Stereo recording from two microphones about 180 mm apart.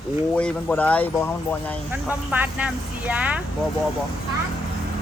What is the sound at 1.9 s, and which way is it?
Speech, 10° right (ahead or behind).